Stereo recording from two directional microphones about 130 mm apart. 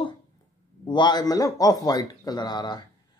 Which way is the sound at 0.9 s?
35° left (ahead or behind).